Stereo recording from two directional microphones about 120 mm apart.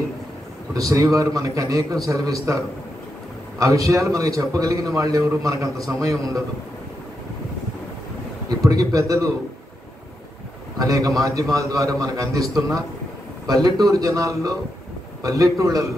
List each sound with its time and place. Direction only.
0.7 s a man's voice: 30° right (ahead or behind)
8.5 s a man's voice: 30° right (ahead or behind)
10.8 s a man's voice: 30° right (ahead or behind)